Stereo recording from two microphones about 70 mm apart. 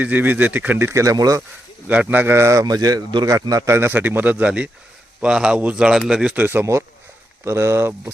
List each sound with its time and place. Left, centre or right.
0.0 s a man's voice: right
0.8 s a man's voice: right
1.0 s speech: right
1.9 s a man's voice: right
2.6 s speech: right
3.7 s a man's voice: right; by 6.3 s centre
6.3 s a man's voice: right